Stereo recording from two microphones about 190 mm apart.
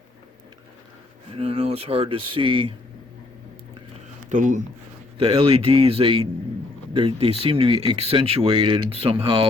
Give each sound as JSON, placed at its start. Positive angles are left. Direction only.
{"t": 1.3, "sound": "speech", "side_deg": -30}
{"t": 4.3, "sound": "speech", "side_deg": -40}
{"t": 5.2, "sound": "speech", "side_deg": -30}